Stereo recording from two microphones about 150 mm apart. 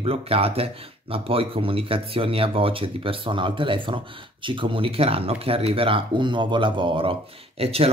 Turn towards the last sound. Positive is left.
turn(degrees=-40)  # may be behind; listen again after turning